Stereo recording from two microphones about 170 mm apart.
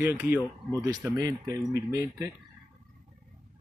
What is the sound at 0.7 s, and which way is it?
A man's voice, 25° right (ahead or behind).